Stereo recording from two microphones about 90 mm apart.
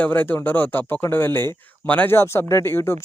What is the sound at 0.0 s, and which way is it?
Speech, 20° left (ahead or behind).